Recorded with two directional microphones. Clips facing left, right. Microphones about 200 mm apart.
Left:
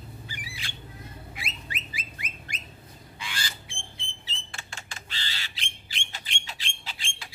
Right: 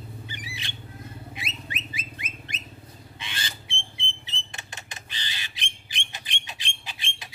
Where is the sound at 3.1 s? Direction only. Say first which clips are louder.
Left 1 dB; 20° right (ahead or behind).